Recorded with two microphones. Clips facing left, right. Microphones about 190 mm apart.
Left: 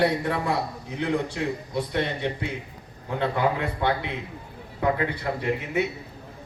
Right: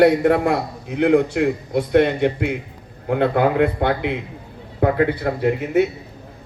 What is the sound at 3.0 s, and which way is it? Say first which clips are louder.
A man's voice: right 7 dB; 65° right (ahead or behind).